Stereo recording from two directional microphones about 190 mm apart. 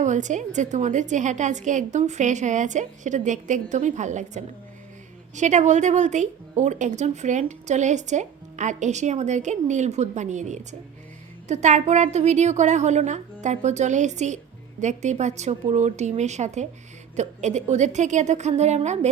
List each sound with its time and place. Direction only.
0.0 s a woman's voice: 40° right (ahead or behind)